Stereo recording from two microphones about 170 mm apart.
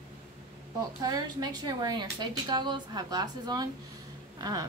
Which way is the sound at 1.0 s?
25° right (ahead or behind).